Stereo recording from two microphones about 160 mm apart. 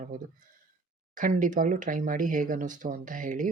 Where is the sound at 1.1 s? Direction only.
55° right (ahead or behind).